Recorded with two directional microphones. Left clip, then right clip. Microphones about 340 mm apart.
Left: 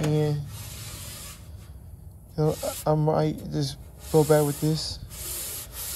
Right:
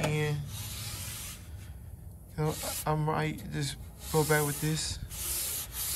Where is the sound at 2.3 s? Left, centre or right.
Centre.